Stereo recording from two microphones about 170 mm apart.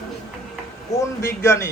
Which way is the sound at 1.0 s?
15° left (ahead or behind).